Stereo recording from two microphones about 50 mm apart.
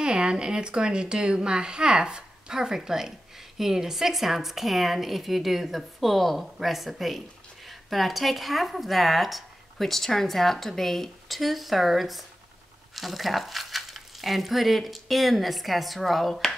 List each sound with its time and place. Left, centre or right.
0.0 s a woman's voice: centre